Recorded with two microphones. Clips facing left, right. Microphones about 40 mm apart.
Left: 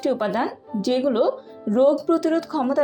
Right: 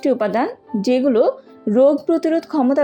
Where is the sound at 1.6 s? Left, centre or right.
Right.